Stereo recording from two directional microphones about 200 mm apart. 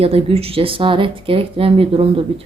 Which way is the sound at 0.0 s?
30° right (ahead or behind).